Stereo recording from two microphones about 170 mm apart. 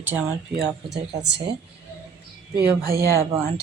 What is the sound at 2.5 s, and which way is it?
Speech, 60° right (ahead or behind).